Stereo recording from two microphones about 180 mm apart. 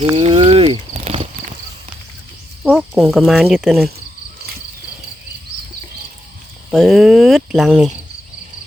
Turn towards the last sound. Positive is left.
turn(degrees=0)  # may be behind; listen again after turning